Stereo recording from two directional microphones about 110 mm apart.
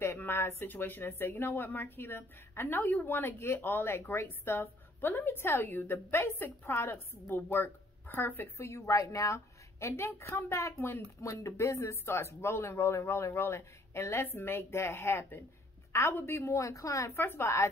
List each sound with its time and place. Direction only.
0.0 s a woman's voice: 20° left (ahead or behind)